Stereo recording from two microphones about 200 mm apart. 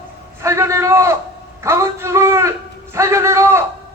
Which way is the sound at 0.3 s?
15° right (ahead or behind).